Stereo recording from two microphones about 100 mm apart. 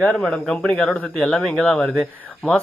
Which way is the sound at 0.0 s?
5° left (ahead or behind).